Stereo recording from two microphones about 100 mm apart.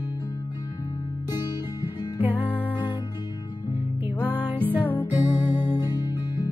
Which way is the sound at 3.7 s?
80° left.